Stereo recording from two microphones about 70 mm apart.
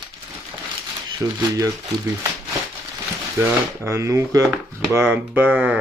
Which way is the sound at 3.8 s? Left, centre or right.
Right.